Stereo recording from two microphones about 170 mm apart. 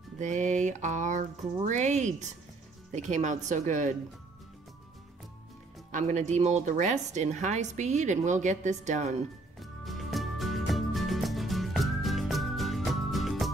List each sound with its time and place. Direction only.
0.2 s a woman's voice: 45° right (ahead or behind)
5.9 s a woman's voice: 45° right (ahead or behind)
9.6 s music: centre (ahead or behind)